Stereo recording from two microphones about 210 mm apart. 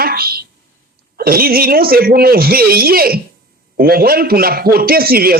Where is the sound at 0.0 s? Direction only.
45° right (ahead or behind).